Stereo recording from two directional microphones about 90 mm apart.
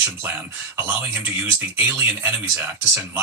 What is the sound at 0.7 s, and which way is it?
Speech, 25° right (ahead or behind).